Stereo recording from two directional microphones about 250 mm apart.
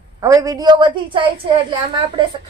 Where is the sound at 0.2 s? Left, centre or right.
Centre.